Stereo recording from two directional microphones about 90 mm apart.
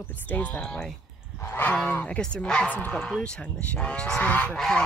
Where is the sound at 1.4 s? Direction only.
25° left (ahead or behind).